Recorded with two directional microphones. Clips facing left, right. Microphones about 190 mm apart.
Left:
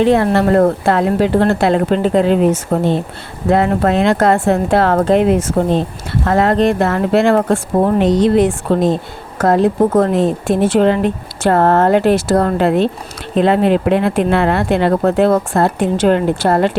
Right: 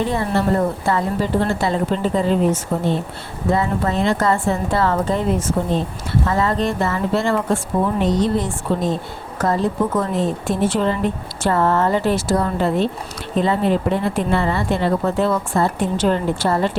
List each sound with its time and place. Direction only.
0.0 s a woman's voice: 80° left
6.2 s speech: 70° left (ahead or behind)
7.9 s a woman's voice: 85° left
9.4 s speech: 70° left (ahead or behind)